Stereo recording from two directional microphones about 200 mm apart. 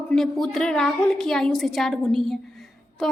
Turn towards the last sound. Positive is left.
turn(degrees=0)  # may be behind; listen again after turning